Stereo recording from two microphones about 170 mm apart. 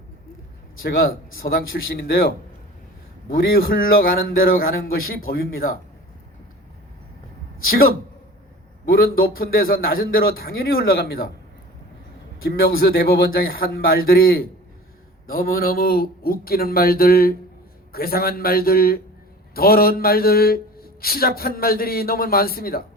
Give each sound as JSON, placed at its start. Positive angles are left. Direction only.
{"t": 0.8, "sound": "a man's voice", "side_deg": 60}
{"t": 7.6, "sound": "a man's voice", "side_deg": 60}
{"t": 9.1, "sound": "a man's voice", "side_deg": 60}
{"t": 12.5, "sound": "a man's voice", "side_deg": 65}